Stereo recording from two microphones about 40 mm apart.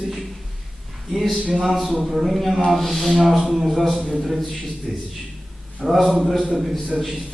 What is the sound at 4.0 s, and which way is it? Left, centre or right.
Speech, right.